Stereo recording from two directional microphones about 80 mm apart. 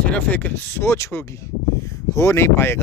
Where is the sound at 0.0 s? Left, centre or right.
Centre.